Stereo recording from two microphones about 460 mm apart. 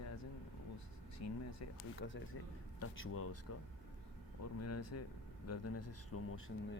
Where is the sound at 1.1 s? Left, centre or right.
Left.